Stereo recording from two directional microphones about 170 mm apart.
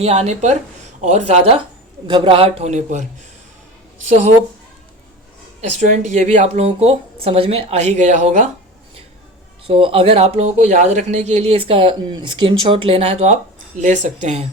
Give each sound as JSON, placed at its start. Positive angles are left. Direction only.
{"t": 0.0, "sound": "speech", "side_deg": -35}
{"t": 2.0, "sound": "speech", "side_deg": -25}
{"t": 5.7, "sound": "speech", "side_deg": -45}
{"t": 9.6, "sound": "speech", "side_deg": -30}